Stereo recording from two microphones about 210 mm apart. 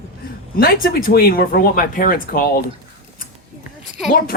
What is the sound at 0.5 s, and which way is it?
Speech, 45° left (ahead or behind).